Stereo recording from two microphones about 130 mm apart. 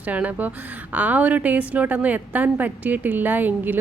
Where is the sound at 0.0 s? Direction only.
10° right (ahead or behind).